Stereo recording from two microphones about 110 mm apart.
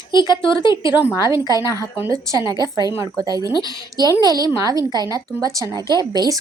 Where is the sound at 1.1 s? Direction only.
30° right (ahead or behind).